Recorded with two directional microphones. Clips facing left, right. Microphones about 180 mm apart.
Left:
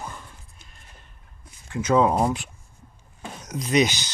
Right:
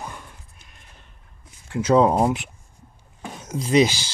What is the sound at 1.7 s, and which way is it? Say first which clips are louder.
Speech: right 3 dB; 30° right (ahead or behind).